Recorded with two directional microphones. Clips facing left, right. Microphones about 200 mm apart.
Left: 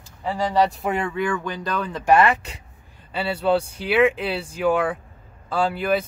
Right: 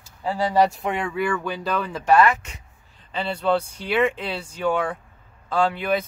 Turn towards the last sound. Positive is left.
turn(degrees=5)  # may be behind; listen again after turning